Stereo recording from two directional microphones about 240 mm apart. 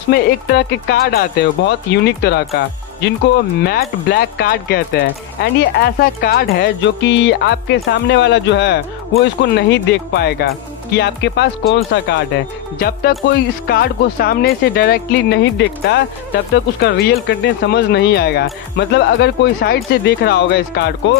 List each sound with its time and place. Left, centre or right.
0.1 s speech: left